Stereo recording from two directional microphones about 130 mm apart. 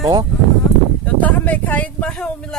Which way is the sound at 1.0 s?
10° left (ahead or behind).